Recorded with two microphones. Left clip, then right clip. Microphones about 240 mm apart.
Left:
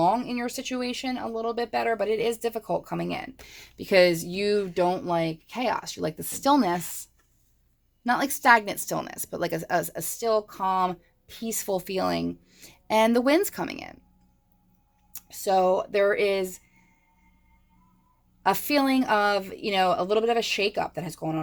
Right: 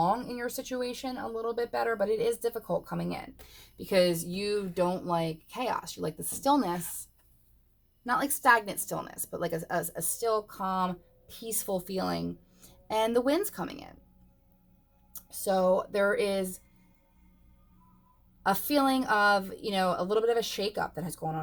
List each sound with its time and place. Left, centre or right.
0.0 s speech: left
15.6 s speech: left
18.5 s speech: left